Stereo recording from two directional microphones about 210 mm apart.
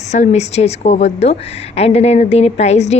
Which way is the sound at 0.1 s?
30° left (ahead or behind).